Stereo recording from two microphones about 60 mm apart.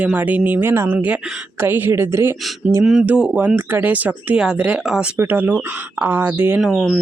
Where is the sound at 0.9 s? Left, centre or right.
Right.